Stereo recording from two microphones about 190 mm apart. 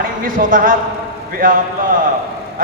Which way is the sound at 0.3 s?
45° right (ahead or behind).